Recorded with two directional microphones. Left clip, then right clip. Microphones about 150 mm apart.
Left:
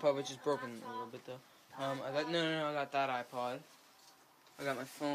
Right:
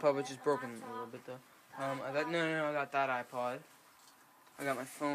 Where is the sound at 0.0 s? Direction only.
20° right (ahead or behind).